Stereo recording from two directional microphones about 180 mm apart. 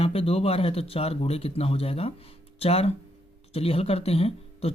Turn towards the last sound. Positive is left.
turn(degrees=35)  # may be behind; listen again after turning